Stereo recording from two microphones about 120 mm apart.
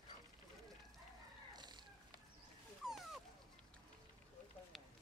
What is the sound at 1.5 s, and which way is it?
Cat, 35° right (ahead or behind).